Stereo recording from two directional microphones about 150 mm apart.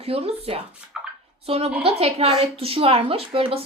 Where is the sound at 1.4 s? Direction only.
40° right (ahead or behind).